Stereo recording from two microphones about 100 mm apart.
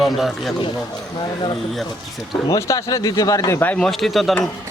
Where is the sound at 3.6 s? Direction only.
10° left (ahead or behind).